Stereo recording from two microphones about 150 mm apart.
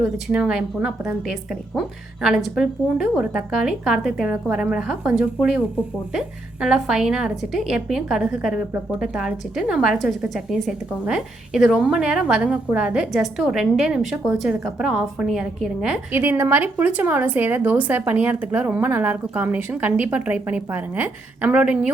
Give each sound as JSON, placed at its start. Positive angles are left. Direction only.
{"t": 0.0, "sound": "a woman's voice", "side_deg": -5}